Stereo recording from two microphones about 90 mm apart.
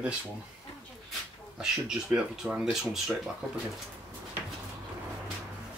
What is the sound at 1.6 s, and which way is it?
Speech, 10° right (ahead or behind).